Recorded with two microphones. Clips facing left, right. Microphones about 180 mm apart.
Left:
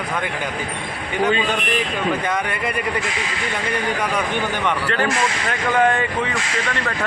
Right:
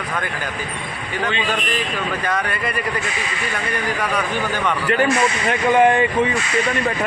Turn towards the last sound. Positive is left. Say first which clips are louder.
# right 4 dB
turn(degrees=-15)  # may be behind; listen again after turning